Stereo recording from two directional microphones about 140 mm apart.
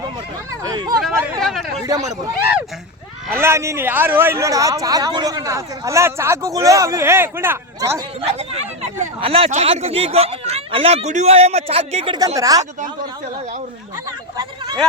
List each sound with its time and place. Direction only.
0.6 s speech: 30° right (ahead or behind)
1.4 s chatter: centre (ahead or behind)
1.9 s speech: 25° right (ahead or behind)
3.3 s speech: 20° right (ahead or behind)
8.3 s speech: 50° right (ahead or behind)
12.4 s speech: 25° right (ahead or behind)
14.3 s a sound: 30° right (ahead or behind)